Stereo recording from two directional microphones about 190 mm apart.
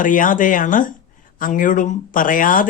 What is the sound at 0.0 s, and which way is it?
Speech, 45° left (ahead or behind).